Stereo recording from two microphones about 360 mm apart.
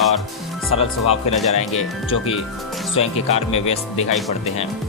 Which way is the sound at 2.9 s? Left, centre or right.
Centre.